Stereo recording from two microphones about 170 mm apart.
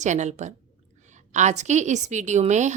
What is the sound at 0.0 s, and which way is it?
A woman's voice, 45° right (ahead or behind).